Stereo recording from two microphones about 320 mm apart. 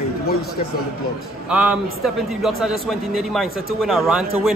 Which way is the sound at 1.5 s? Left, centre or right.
Centre.